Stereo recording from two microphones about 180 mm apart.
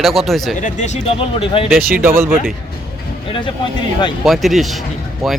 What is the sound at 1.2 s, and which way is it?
Speech, 30° left (ahead or behind).